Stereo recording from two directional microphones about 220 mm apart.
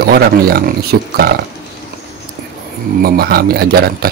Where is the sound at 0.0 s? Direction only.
45° right (ahead or behind).